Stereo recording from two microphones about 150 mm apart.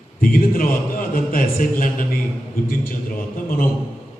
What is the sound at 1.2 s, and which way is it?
Speech, 65° left (ahead or behind).